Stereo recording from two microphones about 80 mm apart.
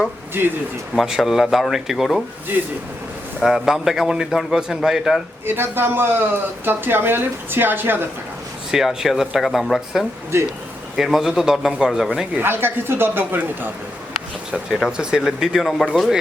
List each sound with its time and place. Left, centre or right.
0.9 s a man's voice: centre
2.5 s speech: right
3.4 s a man's voice: centre
5.5 s speech: right
8.7 s a man's voice: centre
12.3 s speech: right
14.7 s a man's voice: centre
14.9 s speech: centre